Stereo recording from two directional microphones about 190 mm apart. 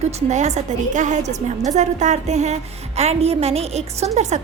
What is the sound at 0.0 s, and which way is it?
A woman's voice, 35° right (ahead or behind).